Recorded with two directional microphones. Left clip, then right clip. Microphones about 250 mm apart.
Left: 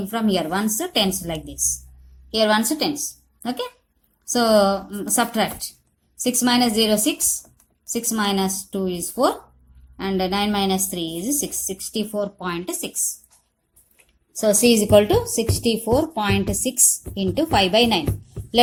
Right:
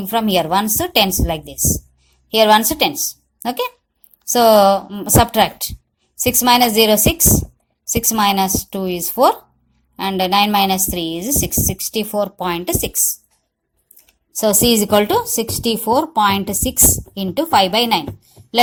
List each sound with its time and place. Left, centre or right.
0.1 s a woman's voice: right
14.1 s a woman's voice: right